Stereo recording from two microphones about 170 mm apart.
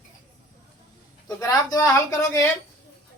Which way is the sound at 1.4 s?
20° left (ahead or behind).